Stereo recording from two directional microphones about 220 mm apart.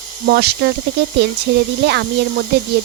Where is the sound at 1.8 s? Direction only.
50° right (ahead or behind).